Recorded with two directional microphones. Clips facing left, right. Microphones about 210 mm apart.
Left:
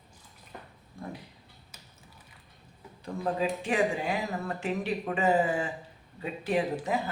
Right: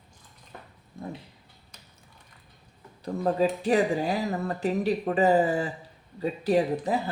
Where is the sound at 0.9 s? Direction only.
20° right (ahead or behind).